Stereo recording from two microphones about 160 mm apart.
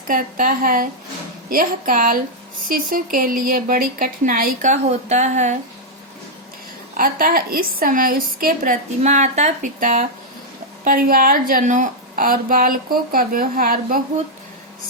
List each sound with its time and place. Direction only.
0.1 s a woman's voice: 55° right (ahead or behind)
6.9 s a woman's voice: 60° right (ahead or behind)
10.8 s a woman's voice: 65° right (ahead or behind)